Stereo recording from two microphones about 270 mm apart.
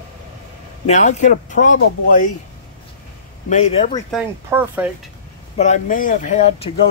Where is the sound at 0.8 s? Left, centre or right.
Left.